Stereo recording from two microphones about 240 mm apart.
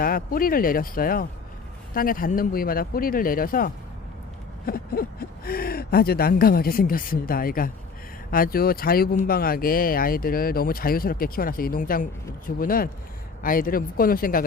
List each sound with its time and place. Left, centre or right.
0.0 s speech: left